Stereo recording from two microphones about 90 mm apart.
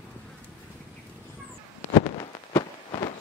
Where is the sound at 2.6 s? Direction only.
60° left (ahead or behind).